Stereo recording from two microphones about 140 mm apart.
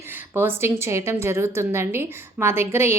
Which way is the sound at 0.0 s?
15° right (ahead or behind).